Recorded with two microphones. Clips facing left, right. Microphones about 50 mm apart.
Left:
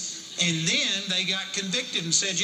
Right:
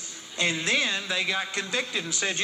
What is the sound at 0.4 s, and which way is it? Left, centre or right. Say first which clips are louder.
Speech: right 2 dB; right.